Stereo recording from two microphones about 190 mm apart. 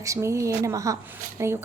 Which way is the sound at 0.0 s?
15° right (ahead or behind).